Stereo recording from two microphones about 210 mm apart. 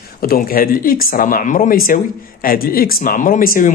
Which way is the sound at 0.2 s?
45° left (ahead or behind).